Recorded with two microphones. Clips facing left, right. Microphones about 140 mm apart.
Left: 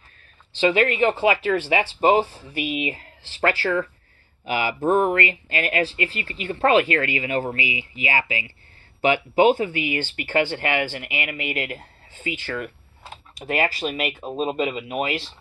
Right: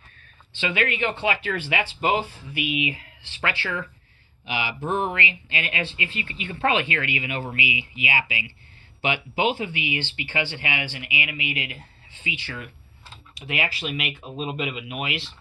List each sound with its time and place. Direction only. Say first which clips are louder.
0.6 s speech: left 7 dB; 40° left (ahead or behind)